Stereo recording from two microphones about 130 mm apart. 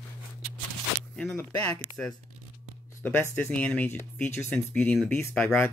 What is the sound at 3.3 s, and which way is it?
Speech, 10° left (ahead or behind).